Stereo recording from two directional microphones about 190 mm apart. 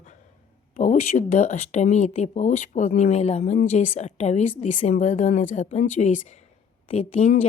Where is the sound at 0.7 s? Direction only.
40° left (ahead or behind).